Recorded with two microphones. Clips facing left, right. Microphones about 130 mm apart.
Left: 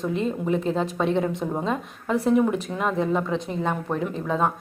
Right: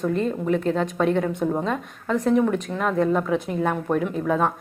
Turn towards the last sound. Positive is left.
turn(degrees=-5)  # may be behind; listen again after turning